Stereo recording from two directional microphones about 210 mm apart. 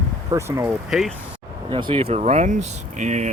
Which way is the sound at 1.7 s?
25° right (ahead or behind).